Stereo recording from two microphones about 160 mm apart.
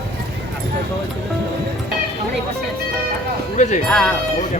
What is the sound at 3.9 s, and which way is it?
Speech, 5° left (ahead or behind).